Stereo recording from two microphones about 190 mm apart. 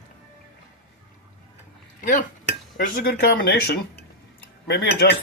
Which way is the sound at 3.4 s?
55° left (ahead or behind).